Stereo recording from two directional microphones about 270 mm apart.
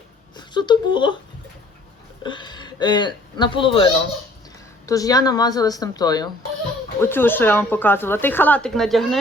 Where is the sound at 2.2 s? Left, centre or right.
Centre.